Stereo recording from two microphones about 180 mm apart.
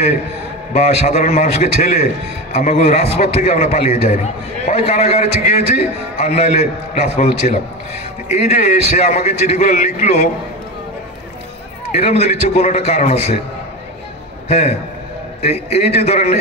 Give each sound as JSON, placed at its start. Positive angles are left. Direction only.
{"t": 0.7, "sound": "a man's voice", "side_deg": 40}
{"t": 11.9, "sound": "a man's voice", "side_deg": 35}
{"t": 14.5, "sound": "a man's voice", "side_deg": 40}